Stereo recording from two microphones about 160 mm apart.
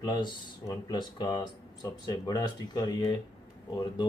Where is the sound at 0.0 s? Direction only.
25° left (ahead or behind).